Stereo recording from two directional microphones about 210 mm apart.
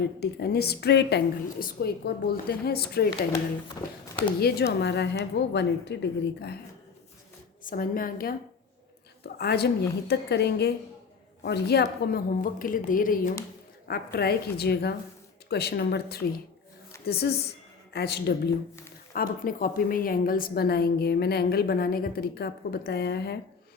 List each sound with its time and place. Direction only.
0.2 s a woman's voice: 50° left (ahead or behind)
3.8 s speech: 15° left (ahead or behind)
4.4 s a woman's voice: 50° left (ahead or behind)
7.6 s a woman's voice: 40° left (ahead or behind)